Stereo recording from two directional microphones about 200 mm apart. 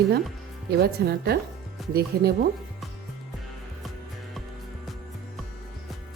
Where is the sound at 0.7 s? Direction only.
55° right (ahead or behind).